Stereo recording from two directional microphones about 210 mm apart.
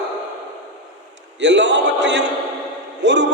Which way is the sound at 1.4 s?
55° right (ahead or behind).